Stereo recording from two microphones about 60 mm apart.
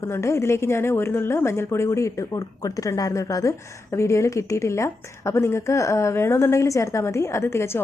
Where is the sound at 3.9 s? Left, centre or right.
Left.